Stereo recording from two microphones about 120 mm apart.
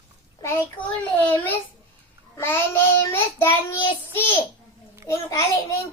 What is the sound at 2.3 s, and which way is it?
Child singing, 20° left (ahead or behind).